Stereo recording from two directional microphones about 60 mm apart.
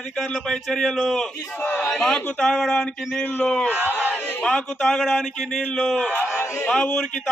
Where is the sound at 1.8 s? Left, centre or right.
Centre.